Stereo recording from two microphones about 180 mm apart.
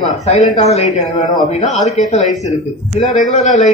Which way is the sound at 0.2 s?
40° left (ahead or behind).